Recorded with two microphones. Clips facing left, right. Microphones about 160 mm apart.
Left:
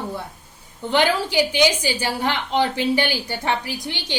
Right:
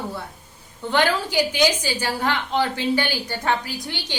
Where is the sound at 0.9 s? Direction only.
15° left (ahead or behind).